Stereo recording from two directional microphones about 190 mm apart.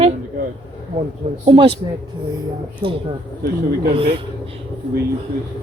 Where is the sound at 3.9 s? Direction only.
30° right (ahead or behind).